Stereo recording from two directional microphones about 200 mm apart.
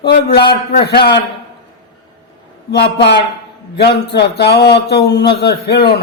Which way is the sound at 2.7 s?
55° left (ahead or behind).